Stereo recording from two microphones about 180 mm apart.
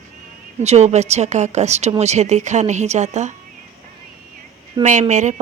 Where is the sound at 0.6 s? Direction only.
40° right (ahead or behind).